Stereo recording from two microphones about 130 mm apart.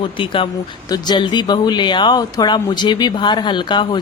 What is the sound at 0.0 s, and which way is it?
Speech, 40° left (ahead or behind).